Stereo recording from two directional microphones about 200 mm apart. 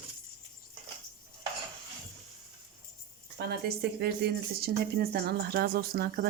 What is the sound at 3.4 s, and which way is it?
Speech, 55° right (ahead or behind).